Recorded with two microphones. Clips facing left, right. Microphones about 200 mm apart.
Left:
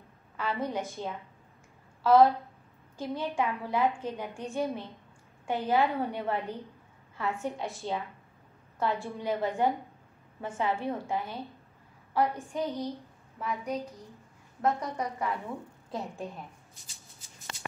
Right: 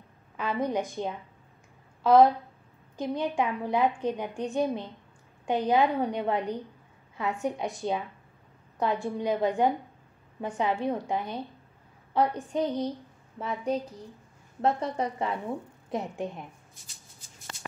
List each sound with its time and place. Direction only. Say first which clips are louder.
0.4 s a woman's voice: right 4 dB; 15° right (ahead or behind)